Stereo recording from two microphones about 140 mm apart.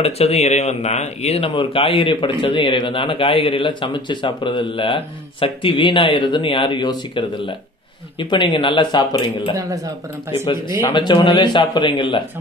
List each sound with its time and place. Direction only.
0.0 s speech: 50° left (ahead or behind)
10.3 s speech: 40° left (ahead or behind)